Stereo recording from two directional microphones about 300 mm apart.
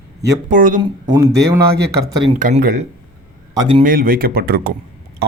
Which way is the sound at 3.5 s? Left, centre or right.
Centre.